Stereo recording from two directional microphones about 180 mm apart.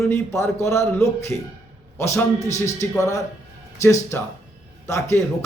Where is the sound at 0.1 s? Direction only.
15° left (ahead or behind).